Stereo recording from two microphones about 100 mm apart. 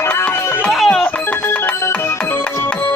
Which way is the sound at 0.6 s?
Centre (ahead or behind).